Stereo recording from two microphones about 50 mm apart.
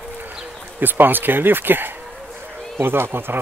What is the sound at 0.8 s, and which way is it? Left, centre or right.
Speech, right.